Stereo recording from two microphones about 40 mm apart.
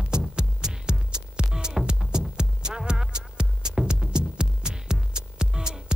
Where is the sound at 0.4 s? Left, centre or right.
Centre.